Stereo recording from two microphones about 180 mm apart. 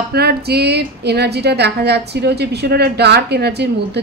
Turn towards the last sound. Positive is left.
turn(degrees=-65)  # may be behind; listen again after turning